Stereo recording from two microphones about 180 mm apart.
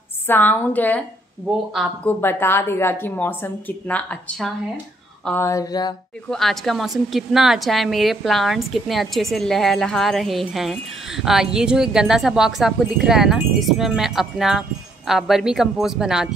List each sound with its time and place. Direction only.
0.3 s a woman's voice: 10° left (ahead or behind)
2.0 s a woman's voice: 15° left (ahead or behind)
6.2 s a woman's voice: centre (ahead or behind)